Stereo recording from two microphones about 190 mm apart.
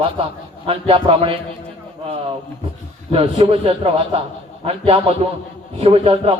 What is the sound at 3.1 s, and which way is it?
Speech, 30° right (ahead or behind).